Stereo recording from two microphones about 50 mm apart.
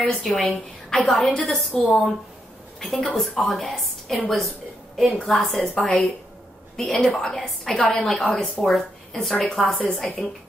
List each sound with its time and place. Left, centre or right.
0.0 s a woman's voice: centre
1.5 s a woman's voice: centre
9.6 s a woman's voice: centre